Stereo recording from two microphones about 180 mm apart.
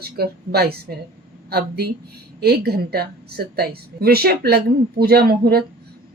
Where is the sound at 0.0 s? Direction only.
60° right (ahead or behind).